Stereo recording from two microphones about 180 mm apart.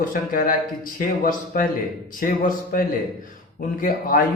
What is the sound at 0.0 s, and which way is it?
A man's voice, 50° left (ahead or behind).